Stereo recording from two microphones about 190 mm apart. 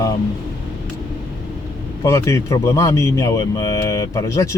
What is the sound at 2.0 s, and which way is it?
Speech, 15° left (ahead or behind).